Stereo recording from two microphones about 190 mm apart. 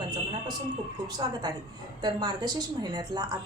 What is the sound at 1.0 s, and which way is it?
A woman's voice, 20° right (ahead or behind).